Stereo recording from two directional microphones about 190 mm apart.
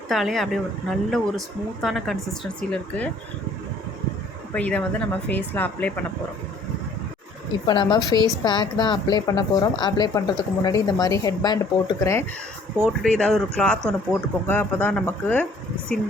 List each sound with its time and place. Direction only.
0.1 s speech: centre (ahead or behind)
4.5 s speech: 5° left (ahead or behind)
7.7 s a woman's voice: 25° left (ahead or behind)
12.8 s speech: 5° left (ahead or behind)